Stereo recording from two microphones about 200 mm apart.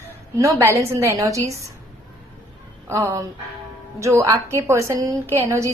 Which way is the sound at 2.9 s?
15° right (ahead or behind).